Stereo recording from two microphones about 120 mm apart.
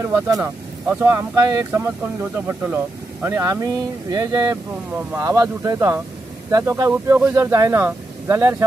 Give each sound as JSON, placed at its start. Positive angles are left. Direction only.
{"t": 0.0, "sound": "speech", "side_deg": -20}
{"t": 1.7, "sound": "speech", "side_deg": -20}